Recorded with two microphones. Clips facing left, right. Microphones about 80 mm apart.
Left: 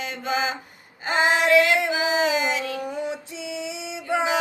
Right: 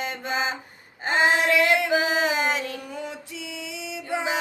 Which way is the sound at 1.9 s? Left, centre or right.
Right.